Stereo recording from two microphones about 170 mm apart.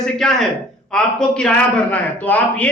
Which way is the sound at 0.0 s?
Centre (ahead or behind).